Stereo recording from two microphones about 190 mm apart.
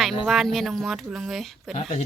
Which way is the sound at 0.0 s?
Centre (ahead or behind).